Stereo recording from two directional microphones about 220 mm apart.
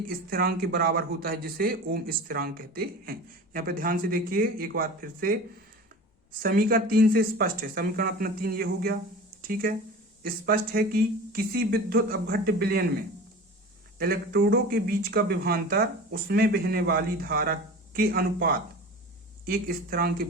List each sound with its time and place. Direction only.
0.1 s speech: 45° right (ahead or behind)
6.4 s speech: 40° right (ahead or behind)
14.0 s speech: 45° right (ahead or behind)